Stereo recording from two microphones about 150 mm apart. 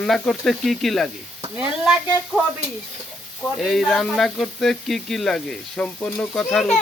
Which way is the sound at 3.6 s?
Centre (ahead or behind).